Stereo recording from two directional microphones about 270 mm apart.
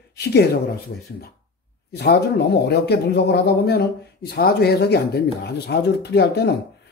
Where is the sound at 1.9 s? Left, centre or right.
Left.